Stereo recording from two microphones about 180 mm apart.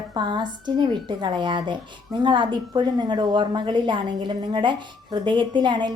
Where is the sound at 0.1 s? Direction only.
25° right (ahead or behind).